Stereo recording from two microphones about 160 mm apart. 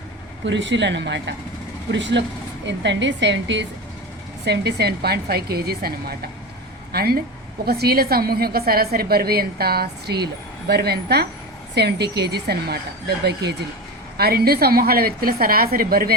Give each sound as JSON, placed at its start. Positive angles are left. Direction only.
{"t": 0.4, "sound": "a woman's voice", "side_deg": -90}
{"t": 14.2, "sound": "a woman's voice", "side_deg": -75}